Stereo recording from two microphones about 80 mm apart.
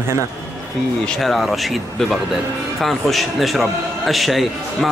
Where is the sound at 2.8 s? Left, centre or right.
Centre.